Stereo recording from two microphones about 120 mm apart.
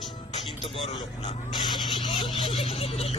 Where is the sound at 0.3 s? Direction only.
45° left (ahead or behind).